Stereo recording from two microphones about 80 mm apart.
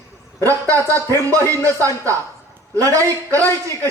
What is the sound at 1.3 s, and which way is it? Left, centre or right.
Speech, right.